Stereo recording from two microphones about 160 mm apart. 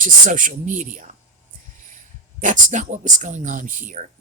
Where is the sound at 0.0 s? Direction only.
55° right (ahead or behind).